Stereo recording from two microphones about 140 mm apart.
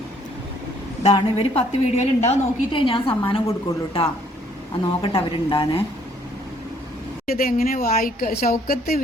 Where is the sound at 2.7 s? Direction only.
40° left (ahead or behind).